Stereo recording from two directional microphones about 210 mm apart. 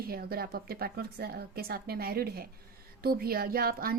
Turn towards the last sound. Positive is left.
turn(degrees=-45)  # may be behind; listen again after turning